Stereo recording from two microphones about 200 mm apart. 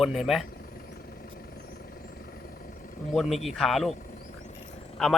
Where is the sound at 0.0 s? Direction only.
Centre (ahead or behind).